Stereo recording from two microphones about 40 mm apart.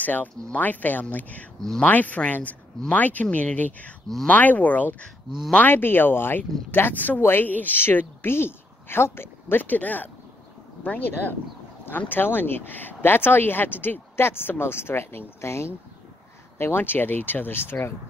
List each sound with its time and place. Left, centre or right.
0.0 s speech: left
5.7 s speech: left
7.2 s speech: left
7.4 s speech: left
7.9 s speech: left
14.1 s speech: left
16.5 s speech: left